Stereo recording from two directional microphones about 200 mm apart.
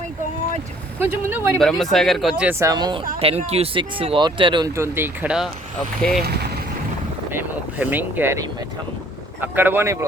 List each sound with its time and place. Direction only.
0.9 s speech: 10° right (ahead or behind)
1.5 s speech: centre (ahead or behind)
7.3 s speech: 10° right (ahead or behind)